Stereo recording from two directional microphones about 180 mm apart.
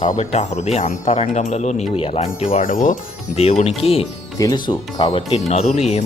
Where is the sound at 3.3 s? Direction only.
35° left (ahead or behind).